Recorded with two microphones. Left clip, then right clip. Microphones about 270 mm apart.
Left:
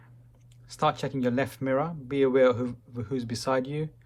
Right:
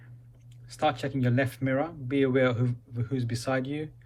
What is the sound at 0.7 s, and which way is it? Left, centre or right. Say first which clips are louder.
Speech: left 1 dB; left.